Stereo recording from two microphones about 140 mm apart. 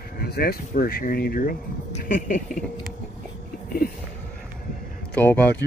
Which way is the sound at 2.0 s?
75° left (ahead or behind).